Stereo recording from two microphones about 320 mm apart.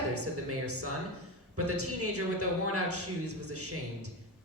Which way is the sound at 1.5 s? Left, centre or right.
Right.